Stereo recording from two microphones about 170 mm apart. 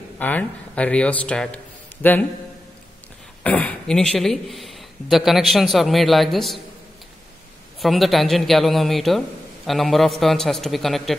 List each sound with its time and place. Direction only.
0.2 s speech: 10° left (ahead or behind)
3.4 s a man's voice: 10° left (ahead or behind)
7.8 s a man's voice: centre (ahead or behind)